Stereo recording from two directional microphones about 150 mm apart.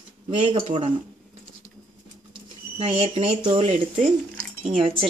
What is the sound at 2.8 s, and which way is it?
A woman's voice, 40° right (ahead or behind).